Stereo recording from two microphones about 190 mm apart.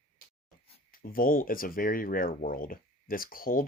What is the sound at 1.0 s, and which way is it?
Speech, 50° left (ahead or behind).